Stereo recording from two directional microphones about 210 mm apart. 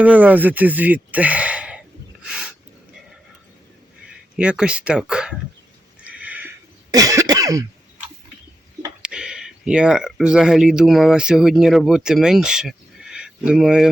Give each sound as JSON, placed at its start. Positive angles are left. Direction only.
{"t": 0.0, "sound": "speech", "side_deg": -5}
{"t": 2.2, "sound": "a sound", "side_deg": -5}
{"t": 4.0, "sound": "speech", "side_deg": -5}
{"t": 6.0, "sound": "horse", "side_deg": -5}
{"t": 6.9, "sound": "cough", "side_deg": -15}
{"t": 9.0, "sound": "speech", "side_deg": -5}